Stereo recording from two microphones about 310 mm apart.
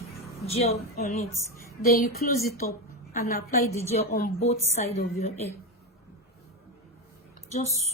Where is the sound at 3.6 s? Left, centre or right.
Centre.